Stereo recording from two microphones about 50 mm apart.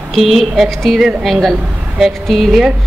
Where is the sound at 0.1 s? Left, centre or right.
Centre.